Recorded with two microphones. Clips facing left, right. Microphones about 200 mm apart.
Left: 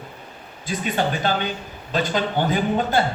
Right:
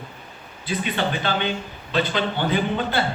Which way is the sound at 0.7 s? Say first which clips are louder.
Left 1 dB; 45° left (ahead or behind).